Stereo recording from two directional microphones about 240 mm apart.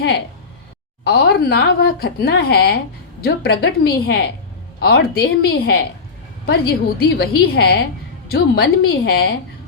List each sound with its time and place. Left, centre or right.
1.0 s a woman's voice: left